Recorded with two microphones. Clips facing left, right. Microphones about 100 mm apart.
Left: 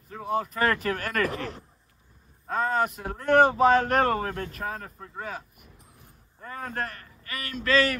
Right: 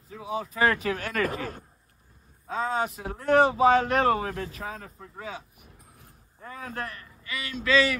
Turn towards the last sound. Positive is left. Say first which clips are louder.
# even
turn(degrees=40)  # may be behind; listen again after turning